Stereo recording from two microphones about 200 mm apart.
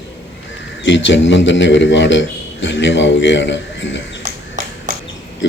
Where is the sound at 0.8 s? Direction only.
65° left (ahead or behind).